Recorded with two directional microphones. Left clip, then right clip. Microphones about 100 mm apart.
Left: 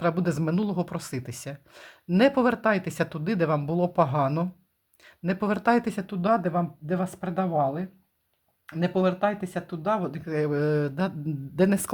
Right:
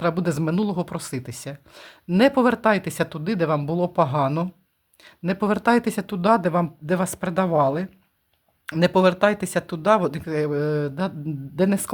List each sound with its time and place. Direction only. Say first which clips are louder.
0.0 s speech: right 3 dB; 15° right (ahead or behind); by 7.9 s 55° right (ahead or behind)
8.6 s speech: right 8 dB; 75° right (ahead or behind)
10.2 s speech: right 3 dB; 15° right (ahead or behind)
10.5 s speech: right 2 dB; 5° right (ahead or behind)